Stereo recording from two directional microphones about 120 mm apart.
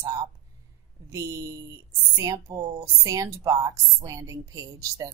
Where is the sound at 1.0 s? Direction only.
25° right (ahead or behind).